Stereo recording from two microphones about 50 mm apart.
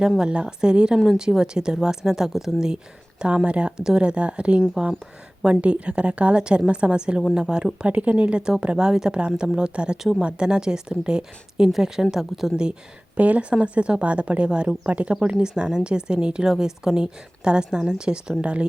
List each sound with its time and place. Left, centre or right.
0.2 s a woman's voice: centre
3.2 s a woman's voice: right; by 12.5 s centre
13.1 s a woman's voice: right